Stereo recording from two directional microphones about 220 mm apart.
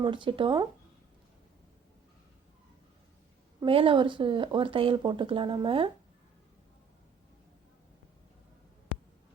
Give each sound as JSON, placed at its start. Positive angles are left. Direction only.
{"t": 0.0, "sound": "speech", "side_deg": -20}
{"t": 3.6, "sound": "speech", "side_deg": -25}